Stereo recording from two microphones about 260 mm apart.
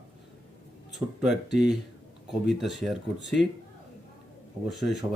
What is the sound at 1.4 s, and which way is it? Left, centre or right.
Speech, left.